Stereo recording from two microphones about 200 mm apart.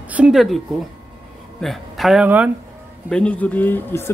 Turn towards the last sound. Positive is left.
turn(degrees=10)  # may be behind; listen again after turning